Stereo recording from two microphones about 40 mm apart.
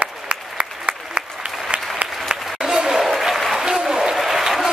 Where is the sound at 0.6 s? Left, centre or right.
Right.